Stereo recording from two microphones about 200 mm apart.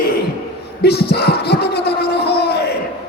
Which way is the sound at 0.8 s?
55° left (ahead or behind).